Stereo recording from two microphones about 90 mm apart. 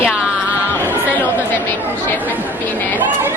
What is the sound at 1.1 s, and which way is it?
Chatter, 20° left (ahead or behind).